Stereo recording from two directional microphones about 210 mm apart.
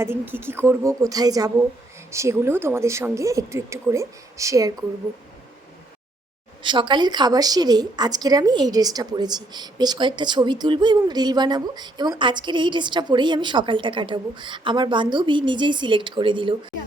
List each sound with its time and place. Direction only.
0.0 s speech: 10° right (ahead or behind)
6.6 s a woman's voice: 20° right (ahead or behind)